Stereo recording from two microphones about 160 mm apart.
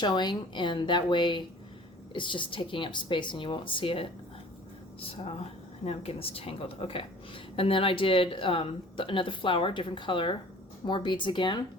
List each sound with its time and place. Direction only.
0.0 s a woman's voice: 25° left (ahead or behind)